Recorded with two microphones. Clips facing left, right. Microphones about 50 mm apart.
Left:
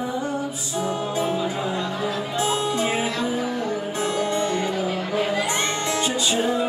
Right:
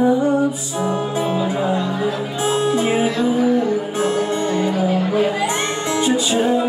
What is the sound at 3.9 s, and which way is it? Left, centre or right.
Music, right.